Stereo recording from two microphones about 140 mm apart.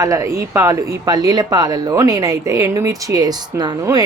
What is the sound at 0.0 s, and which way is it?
Speech, 20° right (ahead or behind).